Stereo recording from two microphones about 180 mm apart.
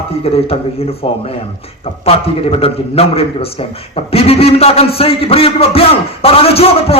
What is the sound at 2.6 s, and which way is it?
A man's voice, 35° left (ahead or behind).